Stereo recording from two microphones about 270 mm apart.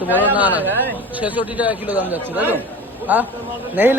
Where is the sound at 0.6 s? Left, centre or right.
Centre.